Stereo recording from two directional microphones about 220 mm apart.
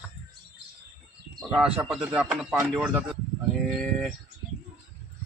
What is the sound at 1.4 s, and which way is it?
Speech, 5° right (ahead or behind).